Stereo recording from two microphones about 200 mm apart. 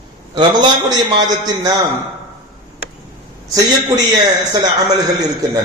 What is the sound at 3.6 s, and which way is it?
A man's voice, 20° right (ahead or behind).